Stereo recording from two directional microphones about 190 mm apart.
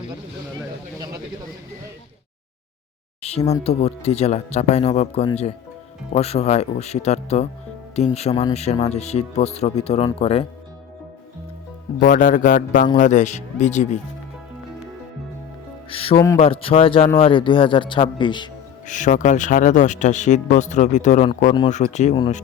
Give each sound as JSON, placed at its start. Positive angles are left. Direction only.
{"t": 3.2, "sound": "a sound", "side_deg": 35}
{"t": 3.6, "sound": "speech", "side_deg": 35}
{"t": 11.9, "sound": "a man's voice", "side_deg": 45}
{"t": 15.9, "sound": "speech", "side_deg": 30}
{"t": 18.9, "sound": "speech", "side_deg": 40}